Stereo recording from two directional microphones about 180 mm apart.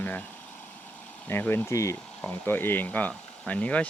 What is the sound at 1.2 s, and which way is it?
Speech, 10° left (ahead or behind).